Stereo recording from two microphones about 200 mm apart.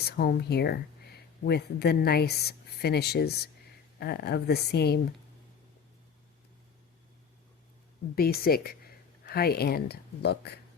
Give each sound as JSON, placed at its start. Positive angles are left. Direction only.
{"t": 0.2, "sound": "speech", "side_deg": 50}
{"t": 8.1, "sound": "speech", "side_deg": 50}